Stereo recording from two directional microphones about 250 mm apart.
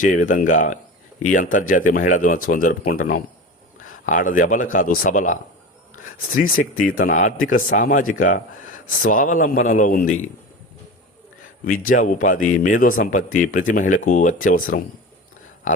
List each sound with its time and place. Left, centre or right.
0.0 s speech: left
11.6 s speech: left